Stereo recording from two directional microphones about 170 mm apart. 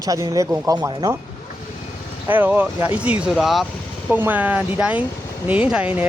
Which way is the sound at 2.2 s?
10° right (ahead or behind).